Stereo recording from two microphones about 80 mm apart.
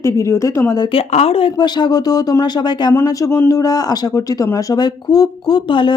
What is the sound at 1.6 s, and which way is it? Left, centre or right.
Speech, left.